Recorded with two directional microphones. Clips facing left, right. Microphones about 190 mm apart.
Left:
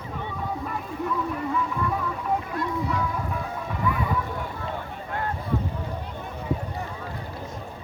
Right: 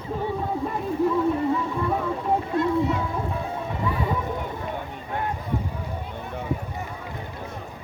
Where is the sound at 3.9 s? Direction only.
30° right (ahead or behind).